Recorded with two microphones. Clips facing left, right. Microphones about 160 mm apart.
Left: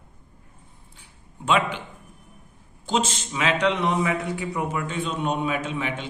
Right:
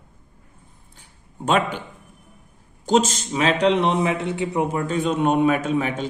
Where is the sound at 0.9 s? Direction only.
45° right (ahead or behind).